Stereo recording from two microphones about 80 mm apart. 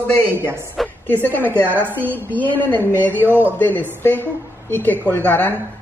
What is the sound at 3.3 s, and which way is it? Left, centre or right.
Speech, right.